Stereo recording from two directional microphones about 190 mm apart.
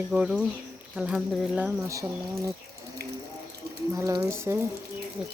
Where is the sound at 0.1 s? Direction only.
5° right (ahead or behind).